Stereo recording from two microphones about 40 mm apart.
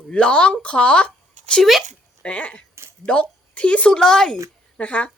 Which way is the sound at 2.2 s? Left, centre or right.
Left.